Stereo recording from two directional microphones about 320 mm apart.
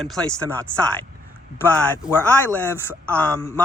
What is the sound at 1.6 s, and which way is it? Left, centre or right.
Speech, centre.